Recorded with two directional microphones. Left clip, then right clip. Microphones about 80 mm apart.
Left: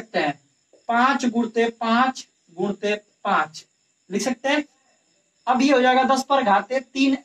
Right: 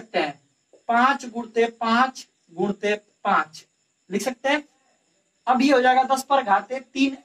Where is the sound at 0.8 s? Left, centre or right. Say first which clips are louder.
Even; left.